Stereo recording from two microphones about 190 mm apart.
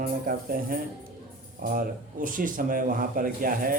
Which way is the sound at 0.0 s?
50° right (ahead or behind).